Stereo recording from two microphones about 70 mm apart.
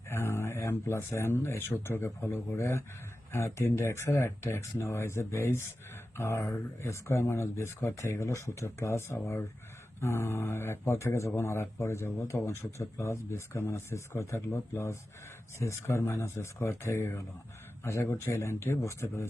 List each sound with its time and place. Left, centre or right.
0.1 s speech: left